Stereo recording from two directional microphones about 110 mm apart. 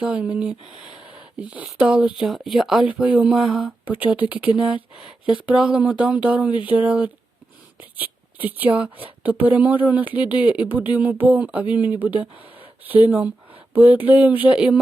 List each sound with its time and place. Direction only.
0.0 s speech: 10° right (ahead or behind)